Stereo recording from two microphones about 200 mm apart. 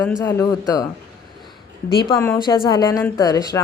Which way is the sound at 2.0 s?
15° left (ahead or behind).